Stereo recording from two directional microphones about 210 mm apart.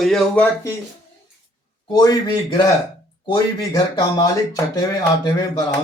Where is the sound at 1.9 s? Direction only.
20° left (ahead or behind).